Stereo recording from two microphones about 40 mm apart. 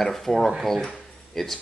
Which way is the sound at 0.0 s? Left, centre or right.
Centre.